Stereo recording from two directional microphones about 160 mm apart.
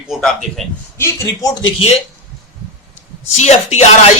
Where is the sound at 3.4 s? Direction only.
45° left (ahead or behind).